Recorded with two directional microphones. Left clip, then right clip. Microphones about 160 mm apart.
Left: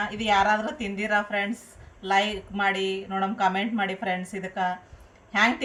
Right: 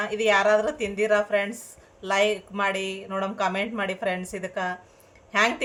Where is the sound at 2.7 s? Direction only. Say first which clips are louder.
Left 1 dB; 50° right (ahead or behind).